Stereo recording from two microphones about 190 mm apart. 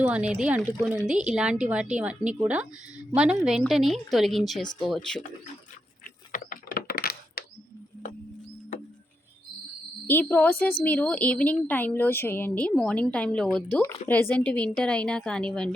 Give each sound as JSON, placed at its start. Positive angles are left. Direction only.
{"t": 0.0, "sound": "speech", "side_deg": -5}
{"t": 6.3, "sound": "typing", "side_deg": 45}
{"t": 10.1, "sound": "a woman's voice", "side_deg": 10}